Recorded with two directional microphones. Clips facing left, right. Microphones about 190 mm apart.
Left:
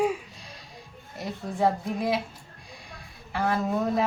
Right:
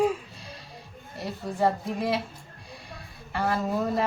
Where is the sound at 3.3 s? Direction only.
Centre (ahead or behind).